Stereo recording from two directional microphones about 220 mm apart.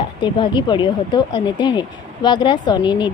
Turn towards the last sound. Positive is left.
turn(degrees=20)  # may be behind; listen again after turning